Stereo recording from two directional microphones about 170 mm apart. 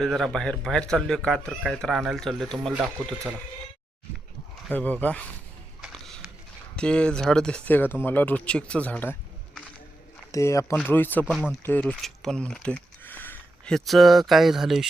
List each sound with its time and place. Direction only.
0.0 s speech: centre (ahead or behind)
4.7 s speech: 10° left (ahead or behind)
5.8 s a sound: centre (ahead or behind)
6.7 s speech: 5° left (ahead or behind)
10.3 s speech: 20° left (ahead or behind); by 14.8 s 5° right (ahead or behind)